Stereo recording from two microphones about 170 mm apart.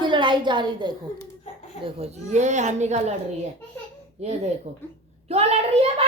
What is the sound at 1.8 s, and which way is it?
Speech, 40° right (ahead or behind).